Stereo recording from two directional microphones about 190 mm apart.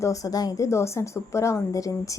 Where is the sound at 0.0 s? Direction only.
15° left (ahead or behind).